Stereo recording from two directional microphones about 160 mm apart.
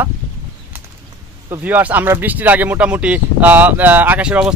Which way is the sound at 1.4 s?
10° right (ahead or behind).